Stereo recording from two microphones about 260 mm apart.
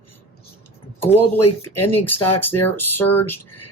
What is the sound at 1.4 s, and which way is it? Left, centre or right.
Speech, left.